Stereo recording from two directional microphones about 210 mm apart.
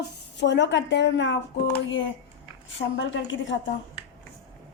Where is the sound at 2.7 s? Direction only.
60° left (ahead or behind).